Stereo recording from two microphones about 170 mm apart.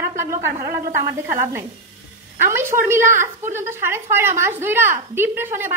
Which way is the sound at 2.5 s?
15° right (ahead or behind).